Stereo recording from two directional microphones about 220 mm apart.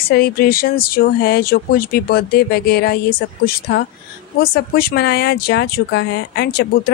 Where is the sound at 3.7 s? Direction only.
55° left (ahead or behind).